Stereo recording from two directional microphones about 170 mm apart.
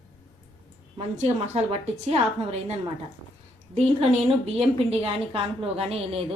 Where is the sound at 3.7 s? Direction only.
35° right (ahead or behind).